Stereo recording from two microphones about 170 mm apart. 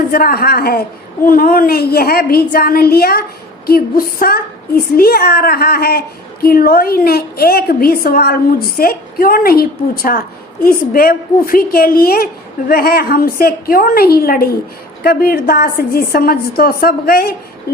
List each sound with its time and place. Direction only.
0.1 s a woman's voice: 60° left (ahead or behind)